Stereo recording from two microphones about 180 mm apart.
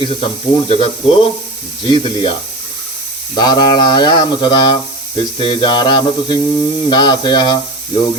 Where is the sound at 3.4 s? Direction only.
25° left (ahead or behind).